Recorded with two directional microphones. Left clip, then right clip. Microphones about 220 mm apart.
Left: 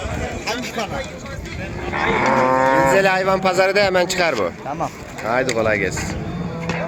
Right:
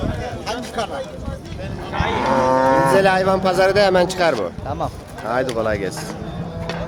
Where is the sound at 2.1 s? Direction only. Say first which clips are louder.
Even; 45° left (ahead or behind).